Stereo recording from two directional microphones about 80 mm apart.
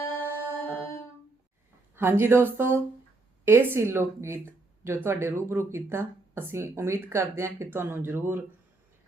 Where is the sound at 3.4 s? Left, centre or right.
Right.